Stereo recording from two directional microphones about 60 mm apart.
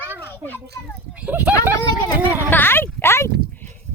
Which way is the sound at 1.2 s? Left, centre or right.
Right.